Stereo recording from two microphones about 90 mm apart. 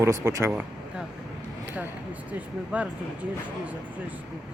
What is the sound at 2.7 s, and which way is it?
Speech, 15° right (ahead or behind).